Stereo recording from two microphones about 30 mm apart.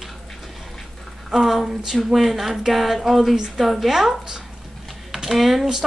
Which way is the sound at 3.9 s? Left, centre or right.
Centre.